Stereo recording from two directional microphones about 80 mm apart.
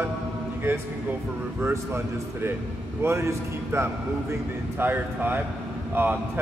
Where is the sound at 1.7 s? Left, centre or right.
Right.